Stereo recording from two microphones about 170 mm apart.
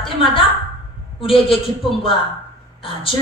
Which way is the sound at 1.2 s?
35° left (ahead or behind).